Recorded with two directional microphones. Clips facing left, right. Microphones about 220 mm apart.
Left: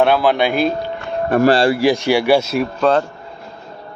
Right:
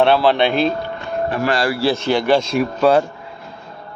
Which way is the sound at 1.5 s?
30° left (ahead or behind).